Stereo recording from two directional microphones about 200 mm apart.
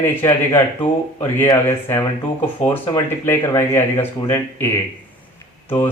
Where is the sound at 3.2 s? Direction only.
15° left (ahead or behind).